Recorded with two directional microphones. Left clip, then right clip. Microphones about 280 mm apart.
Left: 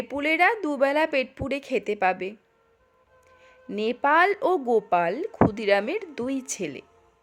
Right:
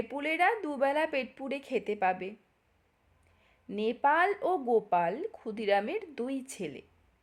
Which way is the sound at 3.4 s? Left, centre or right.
Centre.